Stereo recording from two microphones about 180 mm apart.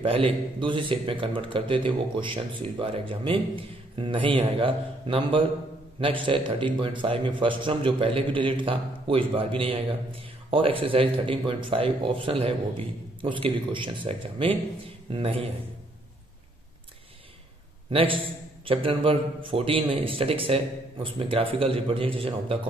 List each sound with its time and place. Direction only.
0.0 s a man's voice: 30° right (ahead or behind)
17.9 s a man's voice: 30° right (ahead or behind)